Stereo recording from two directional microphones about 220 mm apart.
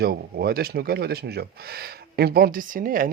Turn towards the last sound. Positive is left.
turn(degrees=-40)  # may be behind; listen again after turning